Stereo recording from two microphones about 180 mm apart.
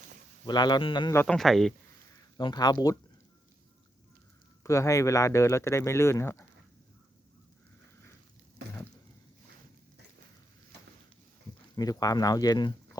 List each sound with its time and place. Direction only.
0.4 s speech: 25° left (ahead or behind)
1.1 s speech: 10° left (ahead or behind)
2.4 s speech: 25° left (ahead or behind)
4.6 s speech: 15° left (ahead or behind)
11.7 s speech: 20° left (ahead or behind)